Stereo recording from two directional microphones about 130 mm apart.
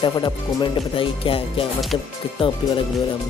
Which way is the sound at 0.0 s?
35° left (ahead or behind).